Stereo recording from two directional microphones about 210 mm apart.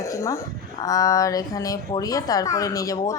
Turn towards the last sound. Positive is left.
turn(degrees=15)  # may be behind; listen again after turning